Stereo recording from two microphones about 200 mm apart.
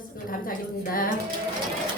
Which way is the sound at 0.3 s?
45° left (ahead or behind).